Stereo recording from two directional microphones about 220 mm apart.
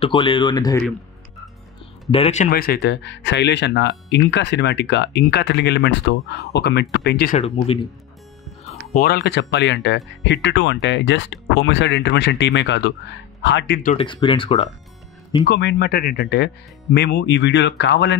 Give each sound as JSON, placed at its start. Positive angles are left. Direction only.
{"t": 0.0, "sound": "speech", "side_deg": 20}
{"t": 2.0, "sound": "speech", "side_deg": 25}
{"t": 7.3, "sound": "speech", "side_deg": 30}
{"t": 8.9, "sound": "speech", "side_deg": 45}
{"t": 13.8, "sound": "speech", "side_deg": 25}
{"t": 15.4, "sound": "speech", "side_deg": 50}